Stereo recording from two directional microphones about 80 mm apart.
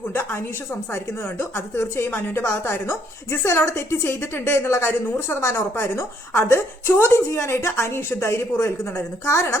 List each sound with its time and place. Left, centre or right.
0.1 s a woman's voice: left